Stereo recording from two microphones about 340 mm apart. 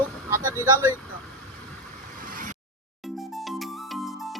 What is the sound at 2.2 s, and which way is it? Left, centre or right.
Vehicle, right.